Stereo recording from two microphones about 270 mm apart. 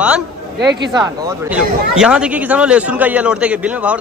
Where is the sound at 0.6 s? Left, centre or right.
Right.